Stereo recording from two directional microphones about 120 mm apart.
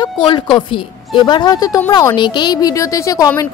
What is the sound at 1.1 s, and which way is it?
A woman's voice, 40° left (ahead or behind).